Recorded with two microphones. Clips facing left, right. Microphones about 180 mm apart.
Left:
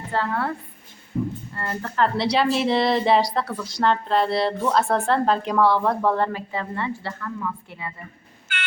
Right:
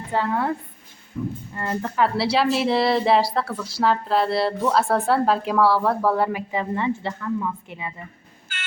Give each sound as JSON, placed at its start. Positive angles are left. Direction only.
{"t": 0.1, "sound": "speech", "side_deg": -15}
{"t": 1.1, "sound": "speech", "side_deg": 45}
{"t": 1.5, "sound": "speech", "side_deg": -15}
{"t": 2.1, "sound": "a woman's voice", "side_deg": -5}